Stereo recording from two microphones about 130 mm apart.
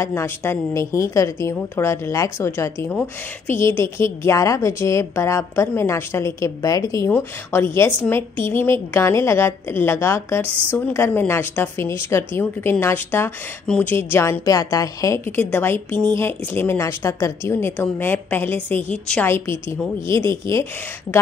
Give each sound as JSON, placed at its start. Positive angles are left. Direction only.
{"t": 0.0, "sound": "a woman's voice", "side_deg": 20}